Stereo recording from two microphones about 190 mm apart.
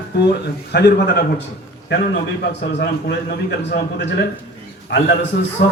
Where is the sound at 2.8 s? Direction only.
60° left (ahead or behind).